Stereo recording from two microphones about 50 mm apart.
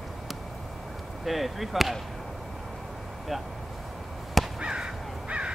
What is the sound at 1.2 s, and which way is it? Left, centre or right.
Speech, centre.